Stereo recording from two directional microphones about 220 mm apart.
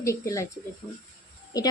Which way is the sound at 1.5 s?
15° left (ahead or behind).